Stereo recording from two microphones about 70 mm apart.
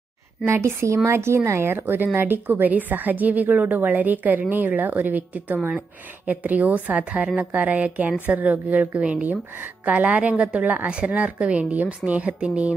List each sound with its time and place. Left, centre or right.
0.5 s a woman's voice: right; by 12.7 s centre